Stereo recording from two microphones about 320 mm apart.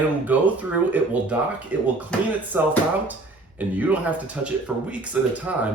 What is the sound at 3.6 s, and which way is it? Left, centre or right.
Speech, centre.